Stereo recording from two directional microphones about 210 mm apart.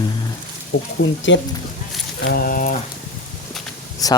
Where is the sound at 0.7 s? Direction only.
60° left (ahead or behind).